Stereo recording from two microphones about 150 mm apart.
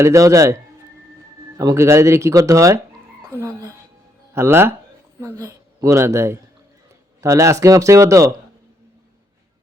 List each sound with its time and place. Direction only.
0.0 s speech: 20° right (ahead or behind)